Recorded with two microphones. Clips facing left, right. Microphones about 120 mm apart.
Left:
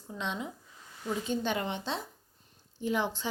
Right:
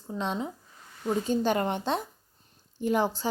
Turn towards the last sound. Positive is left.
turn(degrees=-40)  # may be behind; listen again after turning